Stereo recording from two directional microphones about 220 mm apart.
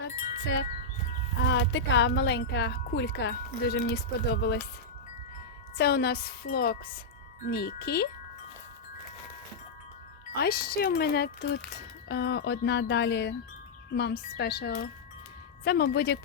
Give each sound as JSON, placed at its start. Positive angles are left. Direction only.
{"t": 0.0, "sound": "chime", "side_deg": 55}
{"t": 1.5, "sound": "speech", "side_deg": 55}
{"t": 5.7, "sound": "speech", "side_deg": 45}
{"t": 10.3, "sound": "speech", "side_deg": 45}